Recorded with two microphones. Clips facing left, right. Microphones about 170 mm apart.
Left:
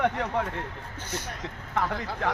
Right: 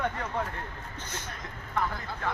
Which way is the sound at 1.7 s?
80° left.